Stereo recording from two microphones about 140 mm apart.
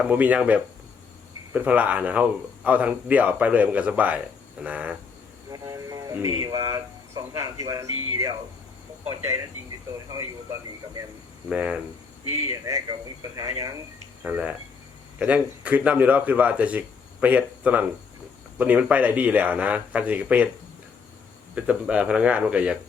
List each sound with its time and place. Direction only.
0.0 s speech: 10° right (ahead or behind)
5.5 s vehicle: 25° right (ahead or behind)
6.6 s speech: 25° right (ahead or behind)
11.4 s speech: 5° right (ahead or behind)
12.3 s speech: 20° right (ahead or behind)
14.3 s speech: 10° right (ahead or behind)
21.5 s speech: 10° right (ahead or behind)